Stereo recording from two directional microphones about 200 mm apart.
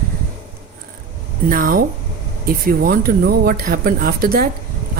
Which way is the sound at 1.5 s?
45° right (ahead or behind).